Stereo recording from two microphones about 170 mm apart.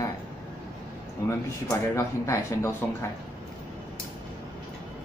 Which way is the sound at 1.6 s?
20° left (ahead or behind).